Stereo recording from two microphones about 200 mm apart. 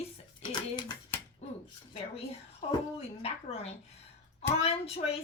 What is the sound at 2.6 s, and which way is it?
Speech, 30° left (ahead or behind).